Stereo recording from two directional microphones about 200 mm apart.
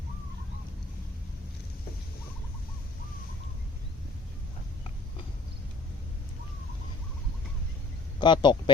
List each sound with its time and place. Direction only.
8.2 s a man's voice: 25° left (ahead or behind)